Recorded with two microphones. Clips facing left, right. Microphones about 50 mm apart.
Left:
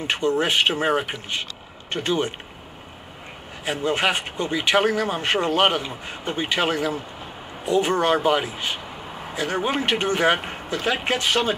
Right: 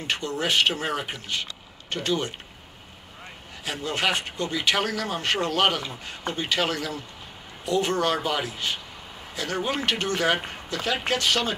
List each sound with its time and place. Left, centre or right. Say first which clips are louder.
0.0 s speech: left 6 dB; left
3.6 s speech: left 4 dB; left